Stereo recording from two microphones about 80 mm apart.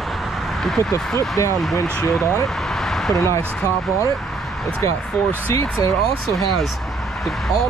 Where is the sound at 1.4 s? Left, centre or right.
Left.